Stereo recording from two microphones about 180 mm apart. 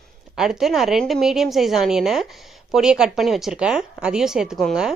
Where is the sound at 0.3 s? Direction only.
Centre (ahead or behind).